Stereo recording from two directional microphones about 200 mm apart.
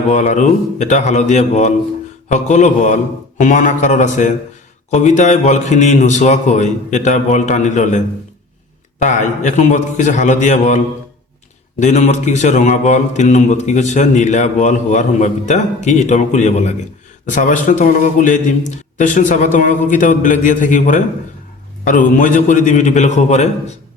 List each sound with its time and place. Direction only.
0.1 s a man's voice: 35° left (ahead or behind)